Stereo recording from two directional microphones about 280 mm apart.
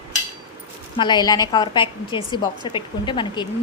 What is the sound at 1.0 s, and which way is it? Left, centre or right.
Speech, centre.